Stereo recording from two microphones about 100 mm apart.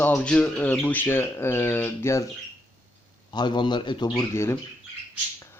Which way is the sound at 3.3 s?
50° left (ahead or behind).